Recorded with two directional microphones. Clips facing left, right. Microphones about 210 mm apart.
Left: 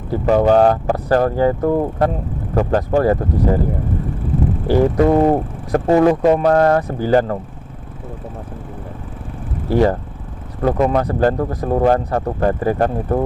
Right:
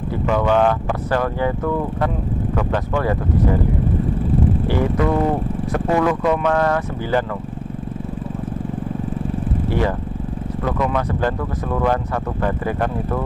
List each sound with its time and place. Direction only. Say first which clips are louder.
0.1 s speech: left 5 dB; 40° left (ahead or behind)
4.6 s speech: left 10 dB; 40° left (ahead or behind)
9.7 s vehicle: left 7 dB; 40° left (ahead or behind)
10.6 s speech: left 6 dB; 40° left (ahead or behind)